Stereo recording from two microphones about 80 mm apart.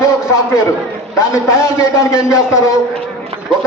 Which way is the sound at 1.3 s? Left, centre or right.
Left.